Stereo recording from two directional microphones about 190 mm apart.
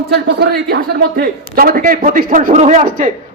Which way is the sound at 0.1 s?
60° right (ahead or behind).